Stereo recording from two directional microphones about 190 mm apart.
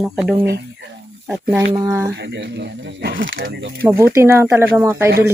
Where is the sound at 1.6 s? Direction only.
20° right (ahead or behind).